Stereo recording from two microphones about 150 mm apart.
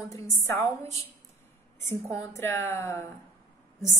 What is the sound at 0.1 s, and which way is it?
A woman's voice, 20° left (ahead or behind).